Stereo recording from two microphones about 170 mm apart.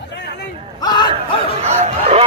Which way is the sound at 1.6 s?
40° right (ahead or behind).